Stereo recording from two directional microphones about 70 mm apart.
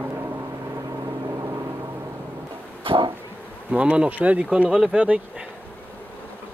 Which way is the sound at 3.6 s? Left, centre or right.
Centre.